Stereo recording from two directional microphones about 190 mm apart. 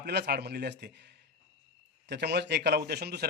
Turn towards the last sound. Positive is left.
turn(degrees=-60)  # may be behind; listen again after turning